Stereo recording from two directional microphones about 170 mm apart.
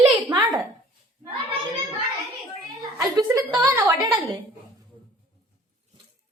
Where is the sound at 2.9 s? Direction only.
20° right (ahead or behind).